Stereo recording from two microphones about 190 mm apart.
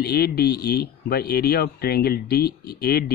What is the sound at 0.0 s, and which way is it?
Speech, 55° left (ahead or behind).